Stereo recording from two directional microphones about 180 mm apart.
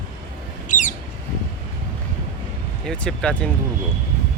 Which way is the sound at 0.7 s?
45° left (ahead or behind).